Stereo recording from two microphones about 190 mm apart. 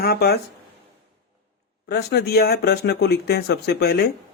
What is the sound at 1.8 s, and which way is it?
Speech, 55° left (ahead or behind).